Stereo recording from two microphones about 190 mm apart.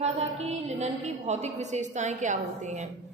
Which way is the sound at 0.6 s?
35° right (ahead or behind).